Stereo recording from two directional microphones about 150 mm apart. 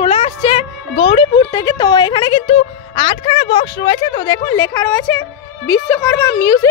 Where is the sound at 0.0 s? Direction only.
40° left (ahead or behind).